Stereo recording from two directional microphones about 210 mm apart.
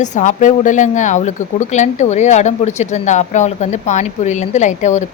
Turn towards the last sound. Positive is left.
turn(degrees=35)  # may be behind; listen again after turning